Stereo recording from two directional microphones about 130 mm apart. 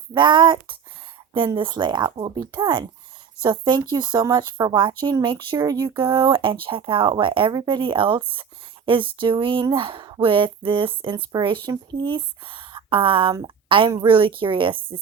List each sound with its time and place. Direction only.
0.1 s a woman's voice: 35° right (ahead or behind)